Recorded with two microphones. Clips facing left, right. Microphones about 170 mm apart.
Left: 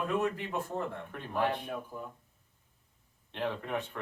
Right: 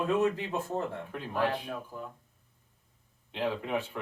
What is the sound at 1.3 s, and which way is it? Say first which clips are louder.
Speech: right 1 dB; 15° left (ahead or behind).